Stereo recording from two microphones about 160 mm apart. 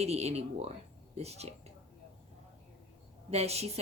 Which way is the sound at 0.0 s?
40° right (ahead or behind).